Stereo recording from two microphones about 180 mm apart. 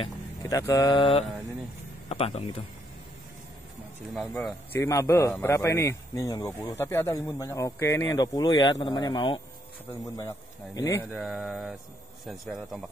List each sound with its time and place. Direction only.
0.0 s a man's voice: 20° left (ahead or behind)
4.1 s speech: 5° left (ahead or behind)
4.7 s speech: 15° left (ahead or behind)
11.1 s speech: centre (ahead or behind)